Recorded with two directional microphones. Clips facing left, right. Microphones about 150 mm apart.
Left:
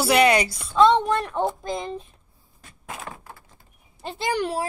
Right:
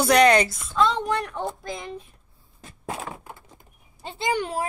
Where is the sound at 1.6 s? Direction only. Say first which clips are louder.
Left 4 dB; 25° left (ahead or behind).